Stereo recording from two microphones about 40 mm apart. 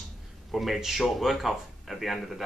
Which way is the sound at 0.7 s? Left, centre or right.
Centre.